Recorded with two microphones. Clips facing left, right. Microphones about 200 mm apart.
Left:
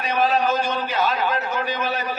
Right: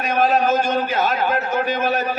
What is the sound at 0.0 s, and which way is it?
A man's voice, 45° right (ahead or behind).